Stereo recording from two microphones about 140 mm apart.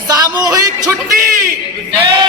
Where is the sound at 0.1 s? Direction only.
25° right (ahead or behind).